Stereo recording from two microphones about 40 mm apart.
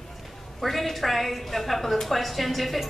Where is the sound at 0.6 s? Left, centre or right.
Centre.